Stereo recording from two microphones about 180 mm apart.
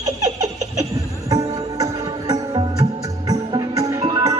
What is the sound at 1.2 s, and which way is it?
Music, 20° right (ahead or behind).